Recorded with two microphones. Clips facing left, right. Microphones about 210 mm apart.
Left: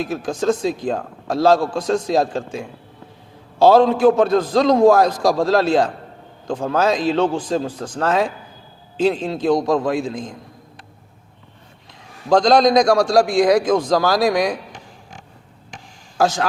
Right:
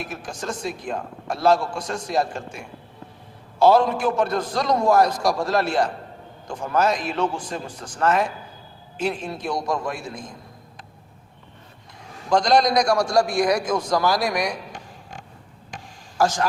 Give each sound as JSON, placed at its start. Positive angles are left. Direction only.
{"t": 0.0, "sound": "a man's voice", "side_deg": 90}
{"t": 12.3, "sound": "a man's voice", "side_deg": 90}